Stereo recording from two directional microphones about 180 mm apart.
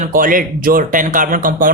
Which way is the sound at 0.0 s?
50° right (ahead or behind).